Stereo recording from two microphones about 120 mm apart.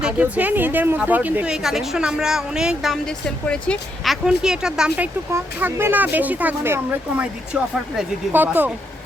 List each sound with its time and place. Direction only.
0.0 s speech: 10° right (ahead or behind)
5.7 s speech: 20° right (ahead or behind)